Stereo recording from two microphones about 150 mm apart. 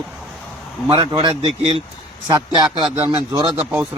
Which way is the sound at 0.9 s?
30° right (ahead or behind).